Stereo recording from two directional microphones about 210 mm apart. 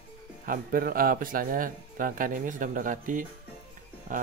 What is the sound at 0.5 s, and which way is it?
Speech, 40° right (ahead or behind).